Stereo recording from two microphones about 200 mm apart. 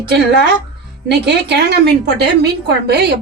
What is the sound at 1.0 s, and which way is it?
A woman's voice, 55° right (ahead or behind).